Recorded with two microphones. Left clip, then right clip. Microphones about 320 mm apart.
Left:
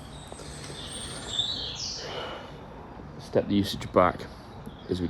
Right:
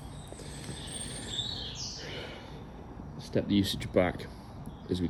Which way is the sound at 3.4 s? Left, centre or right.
Centre.